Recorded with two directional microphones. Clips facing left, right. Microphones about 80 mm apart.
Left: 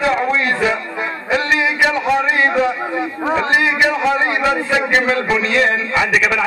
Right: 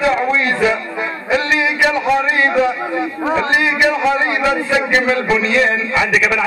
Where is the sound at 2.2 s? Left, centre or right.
Left.